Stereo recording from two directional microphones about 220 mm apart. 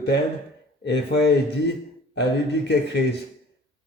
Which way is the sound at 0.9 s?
50° left (ahead or behind).